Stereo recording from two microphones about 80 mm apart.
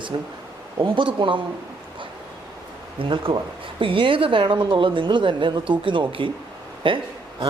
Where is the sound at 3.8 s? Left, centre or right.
Right.